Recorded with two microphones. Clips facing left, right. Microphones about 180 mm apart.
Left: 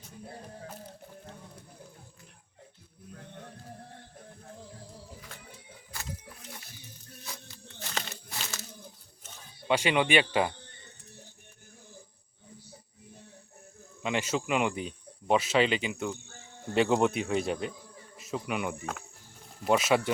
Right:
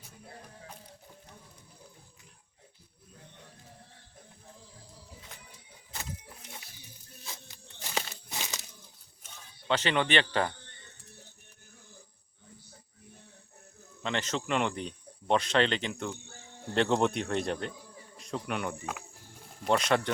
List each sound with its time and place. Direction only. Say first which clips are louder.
5.3 s music: left 3 dB; 15° right (ahead or behind)
7.4 s crumpling: left 2 dB; 10° right (ahead or behind)
9.6 s speech: left 2 dB; 10° left (ahead or behind)
14.0 s speech: left 3 dB; 10° left (ahead or behind)